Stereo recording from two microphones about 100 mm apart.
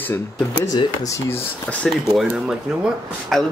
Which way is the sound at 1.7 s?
10° left (ahead or behind).